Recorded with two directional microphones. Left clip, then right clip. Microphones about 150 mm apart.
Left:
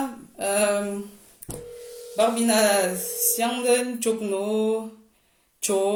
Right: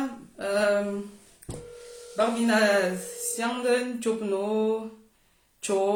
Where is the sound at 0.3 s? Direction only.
10° right (ahead or behind).